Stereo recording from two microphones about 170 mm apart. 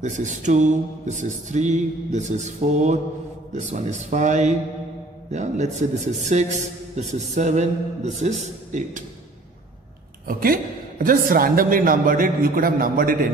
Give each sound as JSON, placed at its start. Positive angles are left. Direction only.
{"t": 0.0, "sound": "a man's voice", "side_deg": -50}
{"t": 10.2, "sound": "a woman's voice", "side_deg": -55}